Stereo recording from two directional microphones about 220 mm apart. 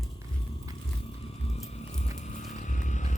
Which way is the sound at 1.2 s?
25° left (ahead or behind).